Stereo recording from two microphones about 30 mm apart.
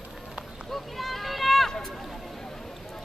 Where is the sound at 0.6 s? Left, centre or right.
Centre.